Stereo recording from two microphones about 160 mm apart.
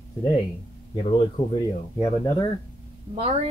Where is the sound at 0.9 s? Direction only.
30° left (ahead or behind).